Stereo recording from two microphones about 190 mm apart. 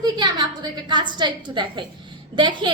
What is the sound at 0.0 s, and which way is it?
A woman's voice, 20° right (ahead or behind).